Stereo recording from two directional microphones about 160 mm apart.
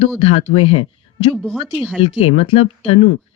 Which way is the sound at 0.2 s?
35° left (ahead or behind).